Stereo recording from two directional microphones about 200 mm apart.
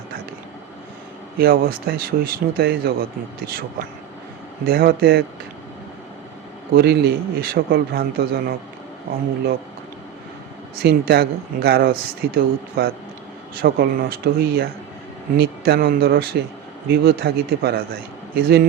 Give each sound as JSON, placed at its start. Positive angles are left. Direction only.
{"t": 1.4, "sound": "speech", "side_deg": -45}
{"t": 4.6, "sound": "speech", "side_deg": -45}
{"t": 6.7, "sound": "speech", "side_deg": -50}
{"t": 10.8, "sound": "speech", "side_deg": -50}